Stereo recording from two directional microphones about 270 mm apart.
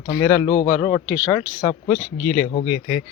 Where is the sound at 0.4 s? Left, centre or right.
Centre.